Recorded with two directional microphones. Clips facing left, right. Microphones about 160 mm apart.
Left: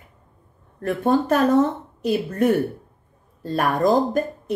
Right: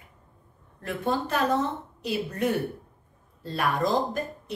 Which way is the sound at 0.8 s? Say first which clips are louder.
Left 9 dB; 50° left (ahead or behind).